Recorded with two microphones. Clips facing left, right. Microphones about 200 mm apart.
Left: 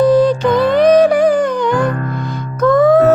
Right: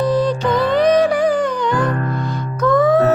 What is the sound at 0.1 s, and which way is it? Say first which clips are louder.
Music: left 5 dB; 50° left (ahead or behind).